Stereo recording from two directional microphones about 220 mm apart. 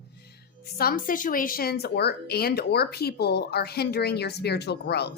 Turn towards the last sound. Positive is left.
turn(degrees=50)  # may be behind; listen again after turning